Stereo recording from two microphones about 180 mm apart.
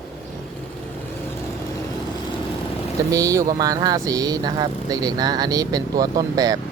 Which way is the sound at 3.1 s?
20° right (ahead or behind).